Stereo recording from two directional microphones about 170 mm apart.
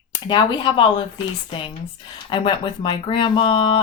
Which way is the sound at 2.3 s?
30° left (ahead or behind).